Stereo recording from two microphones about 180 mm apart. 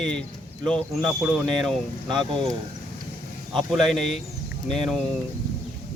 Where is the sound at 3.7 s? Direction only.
Centre (ahead or behind).